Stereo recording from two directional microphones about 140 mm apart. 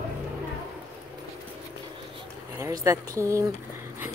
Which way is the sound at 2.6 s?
20° right (ahead or behind).